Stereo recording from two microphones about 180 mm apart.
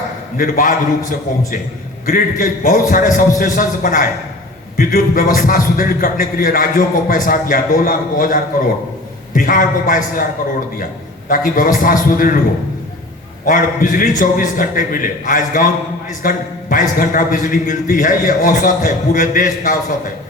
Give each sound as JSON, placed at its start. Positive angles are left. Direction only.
{"t": 0.3, "sound": "a man's voice", "side_deg": 50}
{"t": 11.3, "sound": "a man's voice", "side_deg": 50}
{"t": 13.4, "sound": "a man's voice", "side_deg": 50}